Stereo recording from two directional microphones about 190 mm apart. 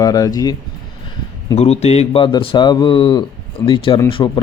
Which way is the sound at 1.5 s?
35° left (ahead or behind).